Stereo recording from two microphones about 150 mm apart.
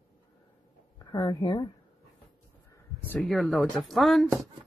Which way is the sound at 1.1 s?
30° left (ahead or behind).